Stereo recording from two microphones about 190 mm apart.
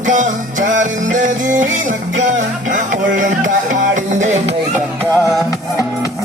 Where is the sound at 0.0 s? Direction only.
40° right (ahead or behind).